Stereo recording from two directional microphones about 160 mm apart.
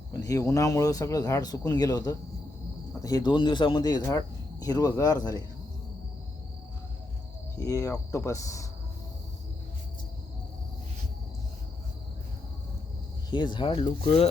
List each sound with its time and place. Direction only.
0.1 s speech: 20° left (ahead or behind)
7.6 s speech: 20° left (ahead or behind)
13.3 s speech: 30° left (ahead or behind)